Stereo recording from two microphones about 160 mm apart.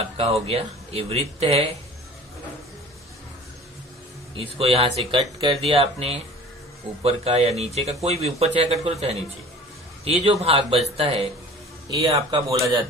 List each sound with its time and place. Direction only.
0.0 s speech: 40° right (ahead or behind)
4.4 s speech: 35° right (ahead or behind)